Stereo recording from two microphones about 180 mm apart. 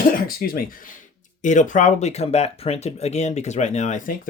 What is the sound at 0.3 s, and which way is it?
Speech, 55° left (ahead or behind).